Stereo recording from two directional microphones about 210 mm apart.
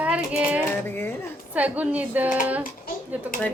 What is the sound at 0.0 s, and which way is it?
Music, 5° right (ahead or behind).